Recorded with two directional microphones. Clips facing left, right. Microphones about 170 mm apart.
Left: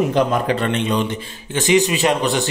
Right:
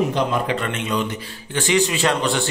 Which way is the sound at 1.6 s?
15° left (ahead or behind).